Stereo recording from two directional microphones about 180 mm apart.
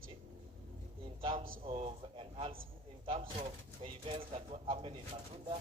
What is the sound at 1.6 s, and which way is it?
A man's voice, 35° right (ahead or behind).